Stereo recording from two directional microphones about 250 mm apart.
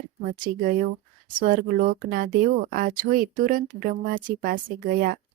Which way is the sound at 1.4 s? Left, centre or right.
Right.